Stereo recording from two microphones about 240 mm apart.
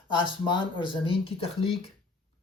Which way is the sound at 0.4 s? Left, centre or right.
Centre.